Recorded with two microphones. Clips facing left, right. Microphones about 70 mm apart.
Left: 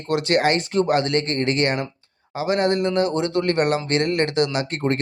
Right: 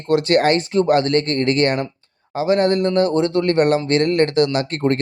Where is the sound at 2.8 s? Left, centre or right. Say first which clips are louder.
Right 4 dB; left.